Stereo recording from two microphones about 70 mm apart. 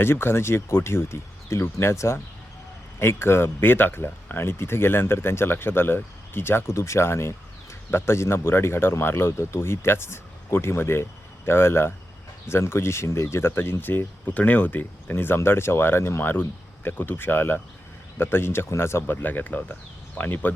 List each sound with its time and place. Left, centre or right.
0.0 s speech: left